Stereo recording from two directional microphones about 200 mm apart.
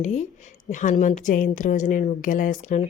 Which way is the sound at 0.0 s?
35° left (ahead or behind).